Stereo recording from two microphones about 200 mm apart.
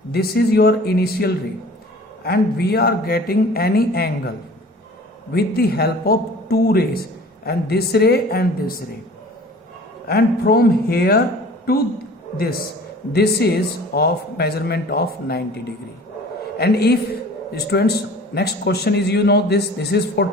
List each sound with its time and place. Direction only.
0.1 s a man's voice: 50° left (ahead or behind)
10.1 s a man's voice: 50° left (ahead or behind)
13.1 s a man's voice: 55° left (ahead or behind)